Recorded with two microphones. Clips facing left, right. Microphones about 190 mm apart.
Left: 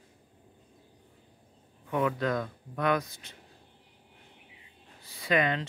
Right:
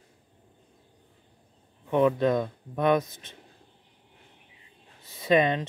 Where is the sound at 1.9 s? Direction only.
25° right (ahead or behind).